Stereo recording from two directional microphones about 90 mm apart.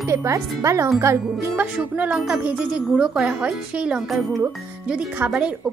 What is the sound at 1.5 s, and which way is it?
Speech, 15° right (ahead or behind).